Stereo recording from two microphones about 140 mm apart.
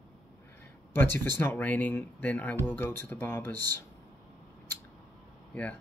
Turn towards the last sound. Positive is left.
turn(degrees=10)  # may be behind; listen again after turning